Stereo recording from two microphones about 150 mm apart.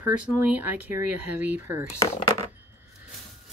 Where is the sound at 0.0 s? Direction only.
15° right (ahead or behind).